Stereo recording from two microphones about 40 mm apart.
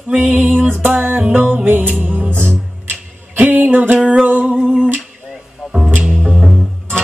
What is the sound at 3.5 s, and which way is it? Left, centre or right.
Music, right.